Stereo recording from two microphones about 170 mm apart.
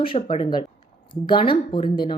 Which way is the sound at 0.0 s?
30° left (ahead or behind).